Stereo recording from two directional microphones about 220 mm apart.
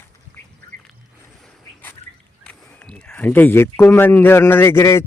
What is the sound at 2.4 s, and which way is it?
Speech, 5° left (ahead or behind).